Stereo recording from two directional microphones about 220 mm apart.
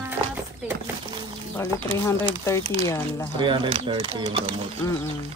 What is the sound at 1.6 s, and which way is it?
Speech, 15° left (ahead or behind).